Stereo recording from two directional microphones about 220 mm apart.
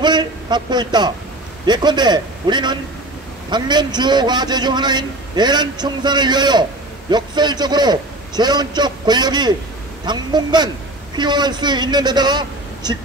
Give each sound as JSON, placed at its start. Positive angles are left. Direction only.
{"t": 0.0, "sound": "a man's voice", "side_deg": -20}